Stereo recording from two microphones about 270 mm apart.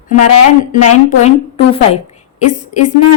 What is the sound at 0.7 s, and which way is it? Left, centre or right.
A woman's voice, left.